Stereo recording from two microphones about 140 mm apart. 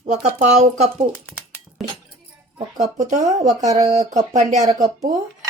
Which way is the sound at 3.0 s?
60° right (ahead or behind).